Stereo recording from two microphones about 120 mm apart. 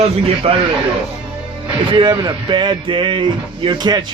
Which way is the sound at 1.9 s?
40° right (ahead or behind).